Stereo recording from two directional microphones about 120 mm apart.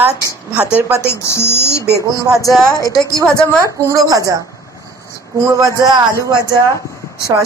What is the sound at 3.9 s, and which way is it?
Speech, 30° right (ahead or behind).